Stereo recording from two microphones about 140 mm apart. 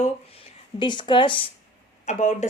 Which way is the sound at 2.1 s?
55° left (ahead or behind).